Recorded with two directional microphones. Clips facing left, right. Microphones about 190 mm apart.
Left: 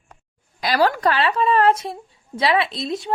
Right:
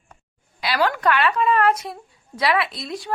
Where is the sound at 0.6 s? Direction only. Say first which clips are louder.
Left 3 dB; 40° left (ahead or behind).